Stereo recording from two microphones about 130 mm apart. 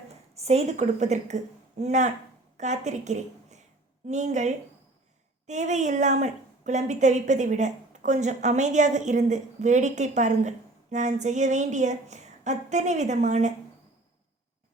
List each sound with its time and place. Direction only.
0.3 s a woman's voice: 55° right (ahead or behind)